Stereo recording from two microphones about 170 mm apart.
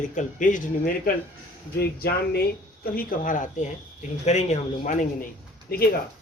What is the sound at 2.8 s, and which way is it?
A man's voice, 55° left (ahead or behind).